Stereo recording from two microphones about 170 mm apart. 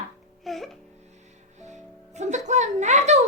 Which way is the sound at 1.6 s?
45° right (ahead or behind).